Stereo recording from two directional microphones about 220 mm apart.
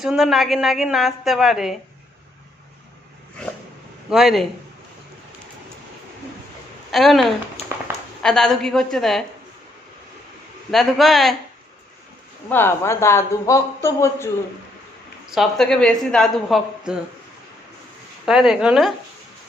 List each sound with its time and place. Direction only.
0.0 s a woman's voice: centre (ahead or behind)
4.1 s a woman's voice: centre (ahead or behind)
6.9 s a woman's voice: centre (ahead or behind)
7.6 s a sound: 30° left (ahead or behind)
8.2 s a woman's voice: centre (ahead or behind)
10.7 s a woman's voice: centre (ahead or behind)
12.5 s speech: 10° left (ahead or behind)
15.4 s a woman's voice: centre (ahead or behind)
18.3 s a woman's voice: centre (ahead or behind)